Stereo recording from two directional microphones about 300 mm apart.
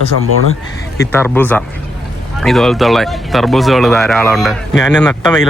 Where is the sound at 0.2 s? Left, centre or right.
Right.